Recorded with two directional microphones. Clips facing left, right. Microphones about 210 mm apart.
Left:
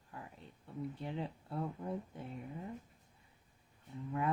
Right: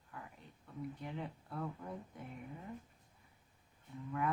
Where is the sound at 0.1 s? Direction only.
25° left (ahead or behind).